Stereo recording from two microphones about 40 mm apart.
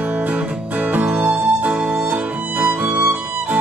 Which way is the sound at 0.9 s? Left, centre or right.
Right.